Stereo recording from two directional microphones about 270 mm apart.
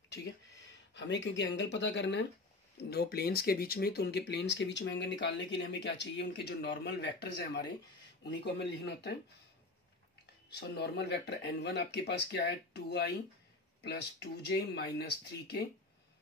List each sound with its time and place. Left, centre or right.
0.1 s speech: left
10.5 s speech: left